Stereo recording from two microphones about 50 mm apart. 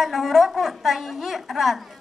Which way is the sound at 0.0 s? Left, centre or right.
Centre.